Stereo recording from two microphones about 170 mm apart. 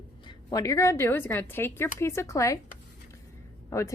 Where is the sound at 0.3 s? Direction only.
20° left (ahead or behind).